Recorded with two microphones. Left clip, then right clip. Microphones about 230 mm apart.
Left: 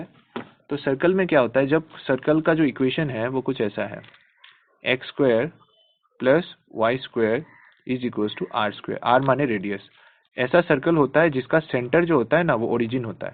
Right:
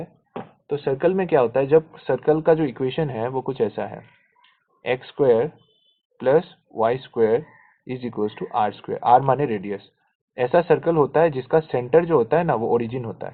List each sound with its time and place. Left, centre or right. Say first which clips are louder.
0.7 s speech: right 1 dB; left